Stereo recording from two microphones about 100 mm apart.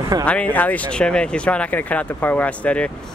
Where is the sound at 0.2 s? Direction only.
10° left (ahead or behind).